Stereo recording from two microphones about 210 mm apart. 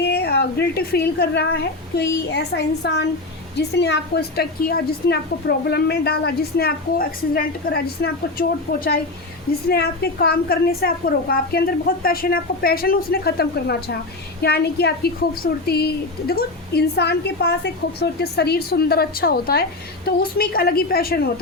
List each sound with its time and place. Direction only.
0.1 s a woman's voice: 50° left (ahead or behind)